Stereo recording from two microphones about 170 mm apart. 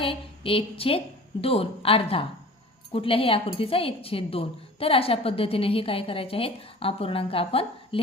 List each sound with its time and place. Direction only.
0.0 s a woman's voice: 30° left (ahead or behind)